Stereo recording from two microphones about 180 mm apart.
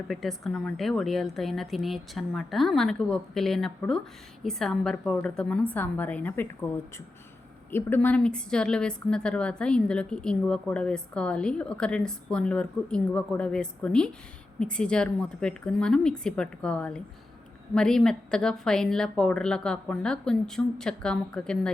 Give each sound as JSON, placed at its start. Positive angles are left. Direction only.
{"t": 0.1, "sound": "a woman's voice", "side_deg": 0}